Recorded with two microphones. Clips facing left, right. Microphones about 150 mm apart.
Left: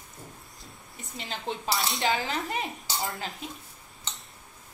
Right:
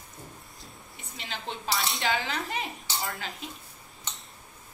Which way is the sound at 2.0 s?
40° left (ahead or behind).